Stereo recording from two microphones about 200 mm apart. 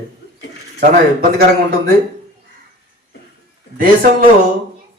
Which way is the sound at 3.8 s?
45° right (ahead or behind).